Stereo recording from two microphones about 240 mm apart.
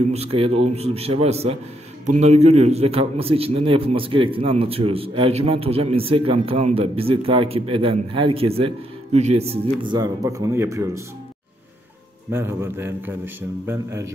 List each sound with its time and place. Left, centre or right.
0.0 s a man's voice: right
12.3 s a man's voice: centre